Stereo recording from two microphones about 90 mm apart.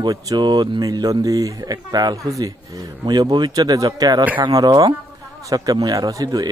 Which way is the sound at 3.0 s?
50° right (ahead or behind).